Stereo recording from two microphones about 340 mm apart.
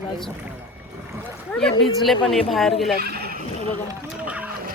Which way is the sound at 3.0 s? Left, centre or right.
Right.